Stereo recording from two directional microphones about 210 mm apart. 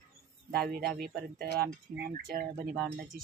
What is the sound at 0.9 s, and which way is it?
Speech, 45° right (ahead or behind).